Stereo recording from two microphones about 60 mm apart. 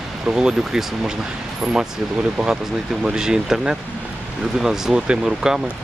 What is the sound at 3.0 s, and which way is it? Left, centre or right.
Speech, centre.